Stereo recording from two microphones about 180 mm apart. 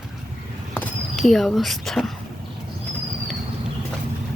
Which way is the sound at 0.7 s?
5° left (ahead or behind).